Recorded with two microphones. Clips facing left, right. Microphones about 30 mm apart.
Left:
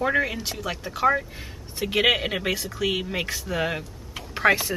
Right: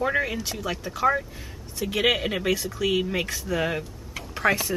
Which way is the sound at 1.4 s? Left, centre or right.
Left.